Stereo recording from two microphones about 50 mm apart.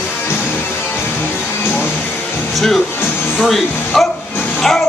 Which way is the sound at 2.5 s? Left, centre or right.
Centre.